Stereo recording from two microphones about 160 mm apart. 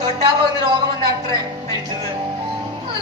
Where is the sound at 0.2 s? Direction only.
30° right (ahead or behind).